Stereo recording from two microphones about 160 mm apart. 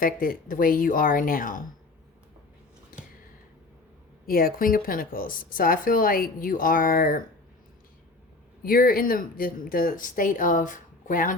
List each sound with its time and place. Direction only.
0.0 s speech: 60° left (ahead or behind)
2.9 s a sound: 60° left (ahead or behind)
4.3 s speech: 65° left (ahead or behind)
8.6 s speech: 65° left (ahead or behind)